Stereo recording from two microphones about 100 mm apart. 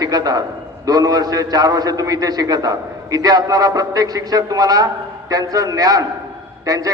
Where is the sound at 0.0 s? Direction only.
40° right (ahead or behind).